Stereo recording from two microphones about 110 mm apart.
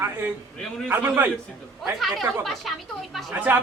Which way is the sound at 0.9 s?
15° right (ahead or behind).